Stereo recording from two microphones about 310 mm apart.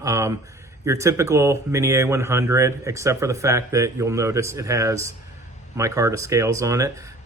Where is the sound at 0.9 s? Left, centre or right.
Centre.